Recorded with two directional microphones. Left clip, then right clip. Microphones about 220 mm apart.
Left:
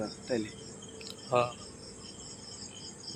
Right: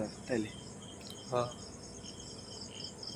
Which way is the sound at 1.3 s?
10° left (ahead or behind).